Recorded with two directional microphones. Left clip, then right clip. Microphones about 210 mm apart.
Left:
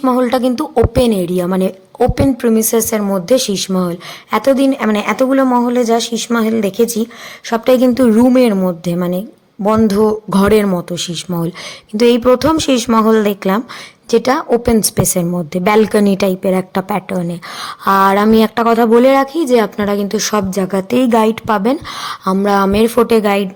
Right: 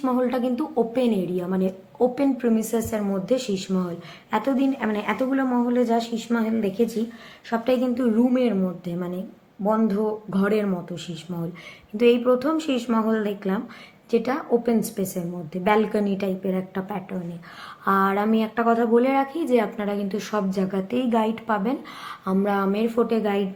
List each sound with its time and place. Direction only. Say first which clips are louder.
0.0 s a woman's voice: left 10 dB; 50° left (ahead or behind)